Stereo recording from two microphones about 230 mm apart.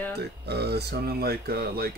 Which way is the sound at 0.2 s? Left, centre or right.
Right.